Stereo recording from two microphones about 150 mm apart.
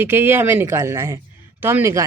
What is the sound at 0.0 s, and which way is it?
Speech, 15° right (ahead or behind).